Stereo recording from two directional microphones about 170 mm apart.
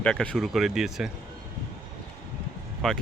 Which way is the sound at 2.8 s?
5° left (ahead or behind).